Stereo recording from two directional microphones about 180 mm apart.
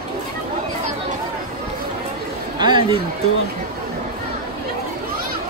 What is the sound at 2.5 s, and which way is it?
Chatter, 25° right (ahead or behind).